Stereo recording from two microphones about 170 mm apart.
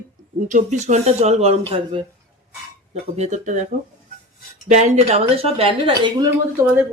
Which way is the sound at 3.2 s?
45° right (ahead or behind).